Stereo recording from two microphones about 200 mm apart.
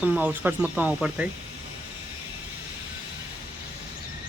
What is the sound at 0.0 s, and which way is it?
Speech, 5° right (ahead or behind).